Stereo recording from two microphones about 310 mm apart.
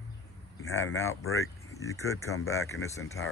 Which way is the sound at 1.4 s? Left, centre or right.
Centre.